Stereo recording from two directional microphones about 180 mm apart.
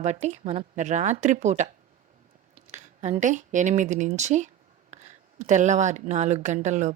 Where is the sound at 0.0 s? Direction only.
40° right (ahead or behind).